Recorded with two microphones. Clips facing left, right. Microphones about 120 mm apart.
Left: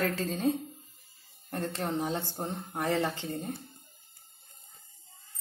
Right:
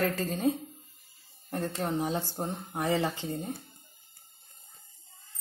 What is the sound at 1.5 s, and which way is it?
Speech, 10° right (ahead or behind).